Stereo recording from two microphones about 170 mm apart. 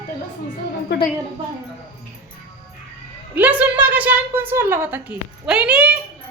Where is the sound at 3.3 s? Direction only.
10° right (ahead or behind).